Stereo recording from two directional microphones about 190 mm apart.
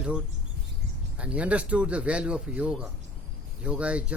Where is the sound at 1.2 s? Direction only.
5° right (ahead or behind).